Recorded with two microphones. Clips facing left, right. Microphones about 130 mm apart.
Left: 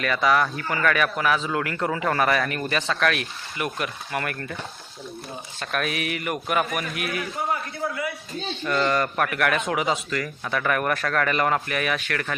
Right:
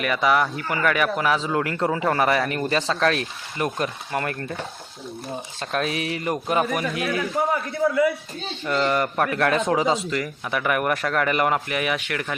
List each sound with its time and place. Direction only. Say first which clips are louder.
0.0 s speech: right 1 dB; 20° right (ahead or behind)
8.6 s speech: right 1 dB; 20° right (ahead or behind)